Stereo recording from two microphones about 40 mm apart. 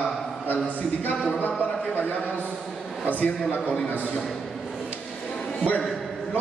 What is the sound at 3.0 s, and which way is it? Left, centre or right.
Speech, left.